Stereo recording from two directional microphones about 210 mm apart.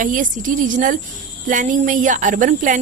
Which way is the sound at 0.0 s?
40° right (ahead or behind).